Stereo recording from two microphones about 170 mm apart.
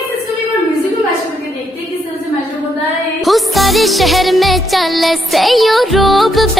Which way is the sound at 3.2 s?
Centre (ahead or behind).